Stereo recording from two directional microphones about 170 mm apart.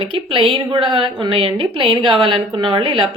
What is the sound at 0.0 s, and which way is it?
A woman's voice, 30° right (ahead or behind).